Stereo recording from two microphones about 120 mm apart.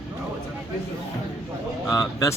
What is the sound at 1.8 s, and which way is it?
Speech, 30° left (ahead or behind).